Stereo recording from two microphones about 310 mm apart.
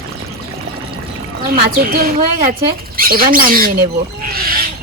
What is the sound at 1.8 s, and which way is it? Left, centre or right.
Speech, right.